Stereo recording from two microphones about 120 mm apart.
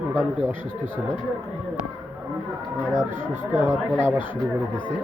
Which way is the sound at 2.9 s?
20° right (ahead or behind).